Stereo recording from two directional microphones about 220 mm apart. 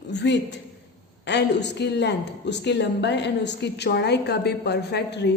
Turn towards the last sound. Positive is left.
turn(degrees=50)  # may be behind; listen again after turning